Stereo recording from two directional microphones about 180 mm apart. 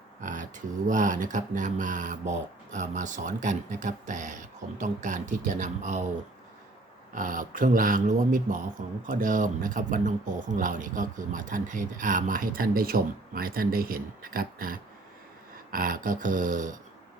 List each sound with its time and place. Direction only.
0.2 s speech: 45° right (ahead or behind)
7.1 s speech: 50° right (ahead or behind)